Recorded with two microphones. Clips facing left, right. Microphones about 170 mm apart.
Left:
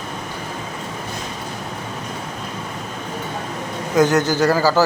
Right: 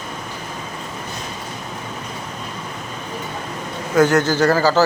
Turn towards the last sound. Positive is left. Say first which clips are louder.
# right 1 dB
turn(degrees=15)  # may be behind; listen again after turning